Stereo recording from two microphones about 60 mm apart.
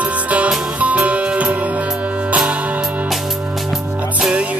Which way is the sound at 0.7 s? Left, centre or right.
Right.